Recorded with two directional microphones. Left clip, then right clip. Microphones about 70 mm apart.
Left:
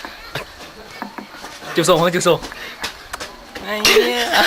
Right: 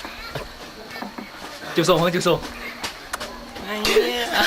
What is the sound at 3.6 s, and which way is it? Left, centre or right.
Chuckle, left.